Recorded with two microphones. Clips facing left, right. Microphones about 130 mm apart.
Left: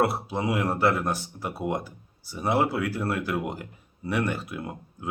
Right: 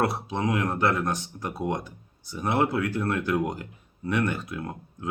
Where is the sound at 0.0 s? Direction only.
5° left (ahead or behind).